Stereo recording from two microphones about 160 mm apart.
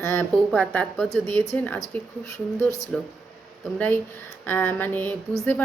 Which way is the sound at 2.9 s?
5° left (ahead or behind).